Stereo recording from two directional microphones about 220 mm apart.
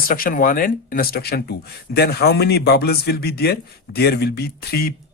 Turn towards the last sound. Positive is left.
turn(degrees=45)  # may be behind; listen again after turning